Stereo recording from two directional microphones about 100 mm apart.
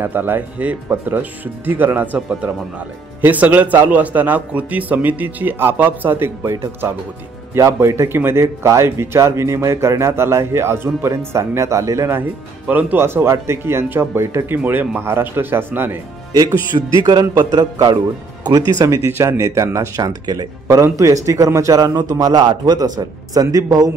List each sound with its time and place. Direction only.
0.0 s a man's voice: 20° right (ahead or behind)
3.2 s a man's voice: 15° right (ahead or behind)
16.3 s a man's voice: 35° right (ahead or behind)
19.0 s speech: 25° right (ahead or behind)